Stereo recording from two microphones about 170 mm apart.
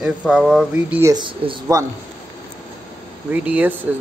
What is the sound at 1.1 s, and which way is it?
Speech, 30° right (ahead or behind).